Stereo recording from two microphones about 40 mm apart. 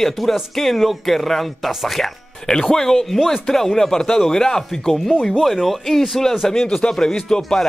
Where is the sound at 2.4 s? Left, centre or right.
Centre.